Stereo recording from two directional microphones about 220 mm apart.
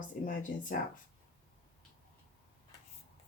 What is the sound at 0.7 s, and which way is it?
Speech, 40° left (ahead or behind).